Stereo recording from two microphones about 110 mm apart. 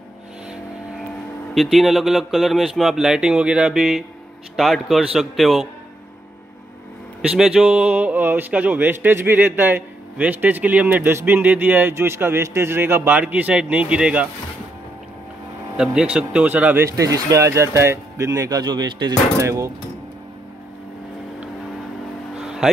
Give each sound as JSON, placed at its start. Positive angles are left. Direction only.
{"t": 1.5, "sound": "speech", "side_deg": 0}
{"t": 7.2, "sound": "speech", "side_deg": -5}
{"t": 15.7, "sound": "speech", "side_deg": -10}
{"t": 16.9, "sound": "speech", "side_deg": -30}
{"t": 19.3, "sound": "speech", "side_deg": -25}
{"t": 22.4, "sound": "music", "side_deg": -5}